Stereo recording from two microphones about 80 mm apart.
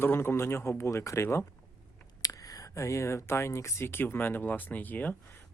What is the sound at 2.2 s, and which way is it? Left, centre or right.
Speech, left.